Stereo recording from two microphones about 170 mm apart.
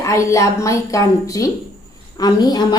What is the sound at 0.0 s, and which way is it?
A woman's voice, 20° left (ahead or behind).